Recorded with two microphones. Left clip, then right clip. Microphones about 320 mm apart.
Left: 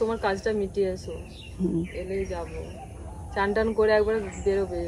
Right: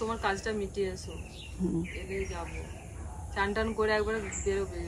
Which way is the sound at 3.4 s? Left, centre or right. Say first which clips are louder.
Left 6 dB; centre.